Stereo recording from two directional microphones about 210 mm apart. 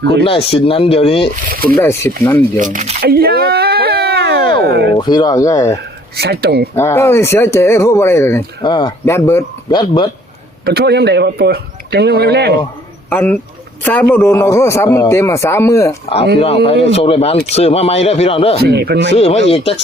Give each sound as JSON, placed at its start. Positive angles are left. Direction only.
{"t": 0.3, "sound": "speech", "side_deg": 25}
{"t": 1.4, "sound": "speech", "side_deg": -45}
{"t": 1.8, "sound": "speech", "side_deg": 10}
{"t": 2.6, "sound": "speech", "side_deg": -35}
{"t": 4.9, "sound": "speech", "side_deg": 20}
{"t": 6.1, "sound": "speech", "side_deg": -50}
{"t": 6.7, "sound": "speech", "side_deg": 10}
{"t": 10.7, "sound": "speech", "side_deg": -50}
{"t": 13.1, "sound": "speech", "side_deg": 10}
{"t": 16.6, "sound": "speech", "side_deg": 25}
{"t": 18.6, "sound": "speech", "side_deg": -50}
{"t": 19.1, "sound": "speech", "side_deg": 30}